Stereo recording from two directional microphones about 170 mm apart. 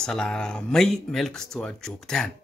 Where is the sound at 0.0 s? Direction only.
5° left (ahead or behind).